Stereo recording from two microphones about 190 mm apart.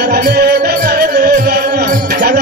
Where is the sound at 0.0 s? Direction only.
55° right (ahead or behind).